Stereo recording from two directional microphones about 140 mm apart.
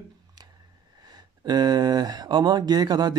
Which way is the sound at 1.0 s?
30° right (ahead or behind).